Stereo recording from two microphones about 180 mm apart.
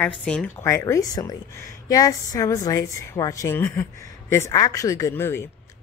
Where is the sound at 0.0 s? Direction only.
5° left (ahead or behind).